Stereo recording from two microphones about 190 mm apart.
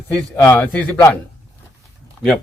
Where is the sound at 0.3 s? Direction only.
10° left (ahead or behind).